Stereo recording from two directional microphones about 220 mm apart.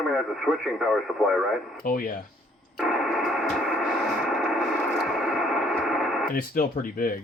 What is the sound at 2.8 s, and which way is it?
Radio, centre (ahead or behind).